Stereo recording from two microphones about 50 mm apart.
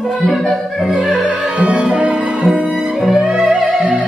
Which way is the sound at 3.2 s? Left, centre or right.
Centre.